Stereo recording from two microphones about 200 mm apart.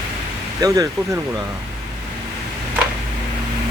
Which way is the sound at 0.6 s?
15° right (ahead or behind).